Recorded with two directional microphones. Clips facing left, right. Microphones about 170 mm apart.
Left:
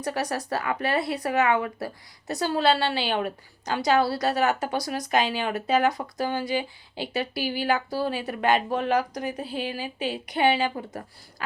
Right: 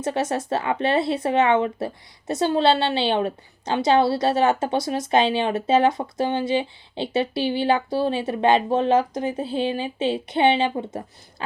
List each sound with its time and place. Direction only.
0.0 s speech: 25° right (ahead or behind)